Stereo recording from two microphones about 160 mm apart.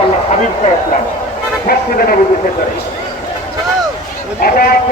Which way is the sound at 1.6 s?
70° left (ahead or behind).